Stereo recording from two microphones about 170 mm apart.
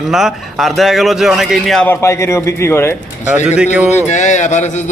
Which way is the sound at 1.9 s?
15° left (ahead or behind).